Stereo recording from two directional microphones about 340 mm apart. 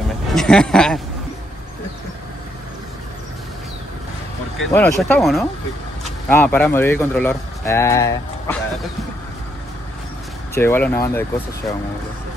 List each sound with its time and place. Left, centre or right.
0.3 s speech: centre
4.6 s speech: centre
10.5 s speech: centre